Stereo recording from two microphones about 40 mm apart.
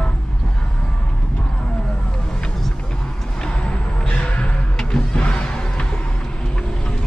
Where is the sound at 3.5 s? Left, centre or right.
Left.